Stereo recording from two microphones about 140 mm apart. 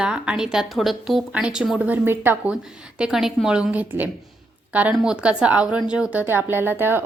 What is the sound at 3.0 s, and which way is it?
A woman's voice, 5° right (ahead or behind).